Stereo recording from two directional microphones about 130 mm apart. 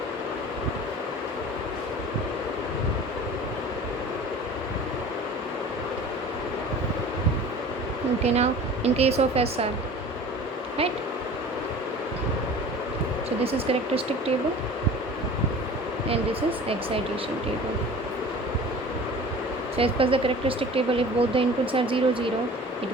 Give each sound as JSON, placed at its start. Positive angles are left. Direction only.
{"t": 8.2, "sound": "speech", "side_deg": -55}
{"t": 13.4, "sound": "speech", "side_deg": -50}
{"t": 16.0, "sound": "speech", "side_deg": -45}
{"t": 19.7, "sound": "speech", "side_deg": -45}